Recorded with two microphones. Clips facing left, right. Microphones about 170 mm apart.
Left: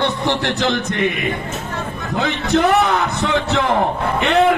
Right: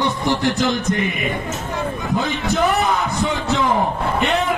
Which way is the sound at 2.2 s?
70° left (ahead or behind).